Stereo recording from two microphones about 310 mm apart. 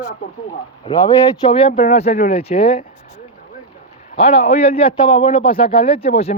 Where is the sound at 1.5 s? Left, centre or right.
Centre.